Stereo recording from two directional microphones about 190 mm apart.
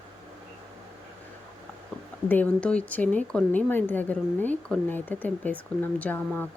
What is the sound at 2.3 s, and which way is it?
A woman's voice, 5° left (ahead or behind).